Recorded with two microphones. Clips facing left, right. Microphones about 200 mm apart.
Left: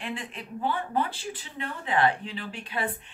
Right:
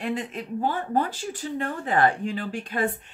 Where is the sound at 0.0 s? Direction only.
40° right (ahead or behind).